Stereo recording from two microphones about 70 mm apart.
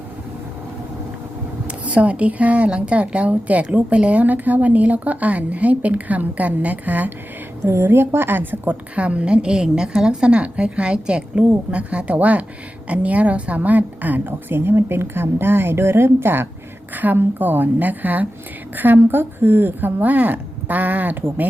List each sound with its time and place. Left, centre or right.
1.6 s a woman's voice: centre
7.8 s a woman's voice: right